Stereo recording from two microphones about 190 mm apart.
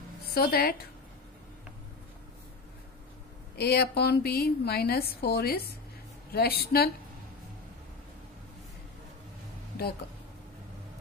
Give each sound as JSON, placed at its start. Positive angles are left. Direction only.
{"t": 0.3, "sound": "a woman's voice", "side_deg": 55}
{"t": 3.5, "sound": "a woman's voice", "side_deg": 55}